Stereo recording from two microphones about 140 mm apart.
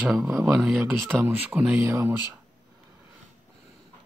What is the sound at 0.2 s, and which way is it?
Speech, 10° right (ahead or behind).